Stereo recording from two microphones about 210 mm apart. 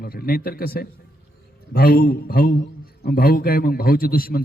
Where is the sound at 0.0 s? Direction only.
45° left (ahead or behind).